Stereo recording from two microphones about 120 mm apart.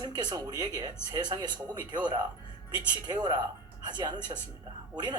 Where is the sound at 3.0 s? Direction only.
35° right (ahead or behind).